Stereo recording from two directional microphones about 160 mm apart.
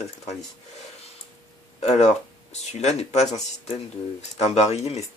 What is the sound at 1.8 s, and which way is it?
Speech, 45° left (ahead or behind).